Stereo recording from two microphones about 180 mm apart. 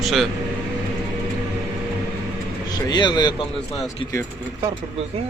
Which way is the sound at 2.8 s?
25° left (ahead or behind).